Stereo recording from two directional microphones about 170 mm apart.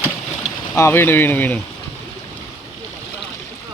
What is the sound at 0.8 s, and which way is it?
Speech, 15° left (ahead or behind).